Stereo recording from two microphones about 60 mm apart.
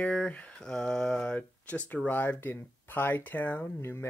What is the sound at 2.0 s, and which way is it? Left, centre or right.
Speech, left.